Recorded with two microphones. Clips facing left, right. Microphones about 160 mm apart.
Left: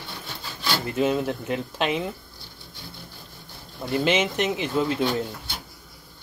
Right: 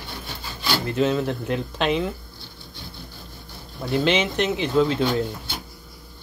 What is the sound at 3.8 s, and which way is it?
Speech, 5° left (ahead or behind).